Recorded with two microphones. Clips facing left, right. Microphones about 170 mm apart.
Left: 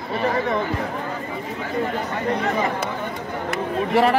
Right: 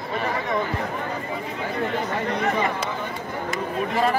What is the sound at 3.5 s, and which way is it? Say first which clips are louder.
Speech: left 4 dB; 70° left (ahead or behind).